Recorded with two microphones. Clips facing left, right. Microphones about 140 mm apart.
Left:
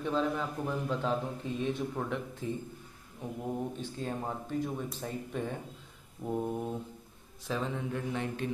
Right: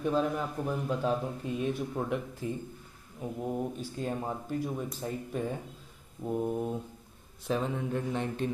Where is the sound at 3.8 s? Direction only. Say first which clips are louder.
Right 2 dB; 10° right (ahead or behind).